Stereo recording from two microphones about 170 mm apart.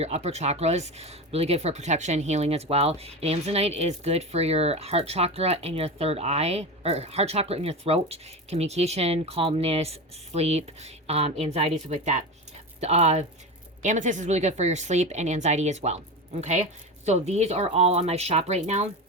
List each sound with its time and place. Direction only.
0.0 s speech: 40° right (ahead or behind)